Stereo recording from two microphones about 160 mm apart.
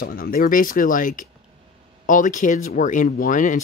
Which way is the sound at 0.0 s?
65° left (ahead or behind).